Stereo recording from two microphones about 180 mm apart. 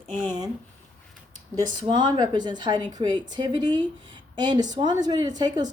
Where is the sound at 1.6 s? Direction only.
25° right (ahead or behind).